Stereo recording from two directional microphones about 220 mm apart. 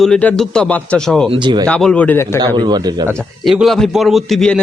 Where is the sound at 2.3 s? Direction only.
25° right (ahead or behind).